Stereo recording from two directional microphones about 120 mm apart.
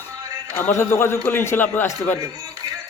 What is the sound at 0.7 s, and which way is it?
Speech, 20° left (ahead or behind).